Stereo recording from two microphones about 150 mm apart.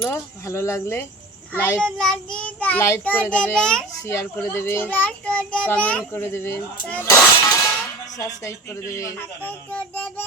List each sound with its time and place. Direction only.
0.0 s a child's voice: 20° left (ahead or behind)
4.0 s a child's voice: 20° left (ahead or behind)